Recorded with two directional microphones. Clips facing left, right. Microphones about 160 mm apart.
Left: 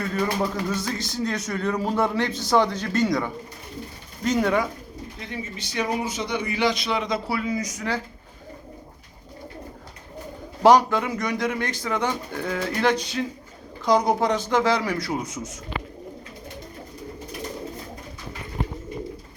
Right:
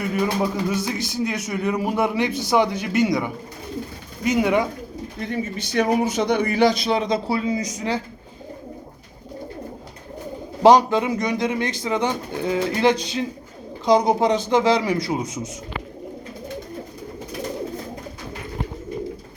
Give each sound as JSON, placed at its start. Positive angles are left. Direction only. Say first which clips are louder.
{"t": 0.0, "sound": "speech", "louder": "right 3 dB", "side_deg": -15}
{"t": 5.7, "sound": "a man's voice", "louder": "right 7 dB", "side_deg": -50}
{"t": 10.6, "sound": "speech", "louder": "right 3 dB", "side_deg": -20}